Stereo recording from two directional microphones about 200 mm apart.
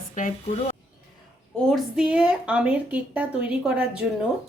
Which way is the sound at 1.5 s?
Centre (ahead or behind).